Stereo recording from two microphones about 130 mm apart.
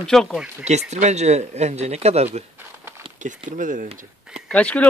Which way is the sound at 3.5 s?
80° right.